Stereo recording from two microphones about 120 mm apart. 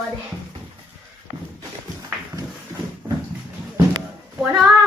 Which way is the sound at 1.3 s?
75° right (ahead or behind).